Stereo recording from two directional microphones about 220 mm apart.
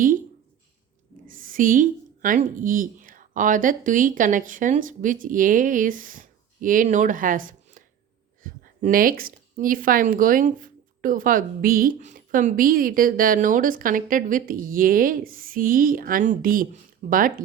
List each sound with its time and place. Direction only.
1.3 s a woman's voice: 40° right (ahead or behind)